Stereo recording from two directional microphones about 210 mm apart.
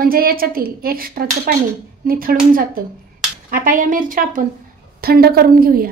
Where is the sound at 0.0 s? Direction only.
45° right (ahead or behind).